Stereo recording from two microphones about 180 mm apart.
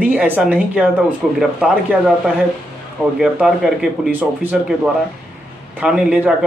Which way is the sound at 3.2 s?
5° right (ahead or behind).